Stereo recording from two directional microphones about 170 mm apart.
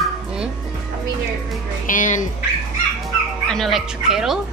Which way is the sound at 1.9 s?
50° left (ahead or behind).